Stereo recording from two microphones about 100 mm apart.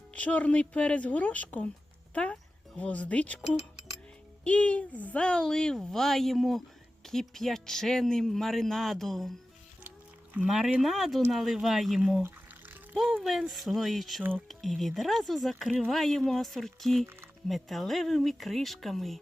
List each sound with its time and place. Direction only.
0.1 s a woman's voice: 15° left (ahead or behind)
10.3 s speech: 5° right (ahead or behind)
12.2 s music: 20° right (ahead or behind)
13.1 s speech: centre (ahead or behind)